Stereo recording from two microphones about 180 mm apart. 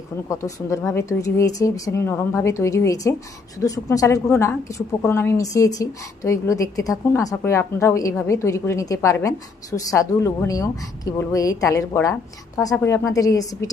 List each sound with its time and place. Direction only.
0.3 s a woman's voice: 15° left (ahead or behind)